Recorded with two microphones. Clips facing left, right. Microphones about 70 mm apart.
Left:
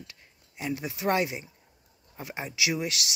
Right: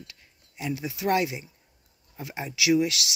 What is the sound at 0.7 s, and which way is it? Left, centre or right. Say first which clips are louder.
Speech: right 2 dB; left.